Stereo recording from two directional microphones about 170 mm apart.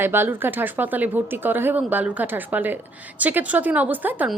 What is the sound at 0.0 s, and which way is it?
A woman's voice, 15° right (ahead or behind).